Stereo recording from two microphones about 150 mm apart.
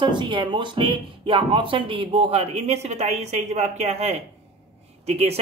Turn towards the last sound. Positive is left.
turn(degrees=-45)  # may be behind; listen again after turning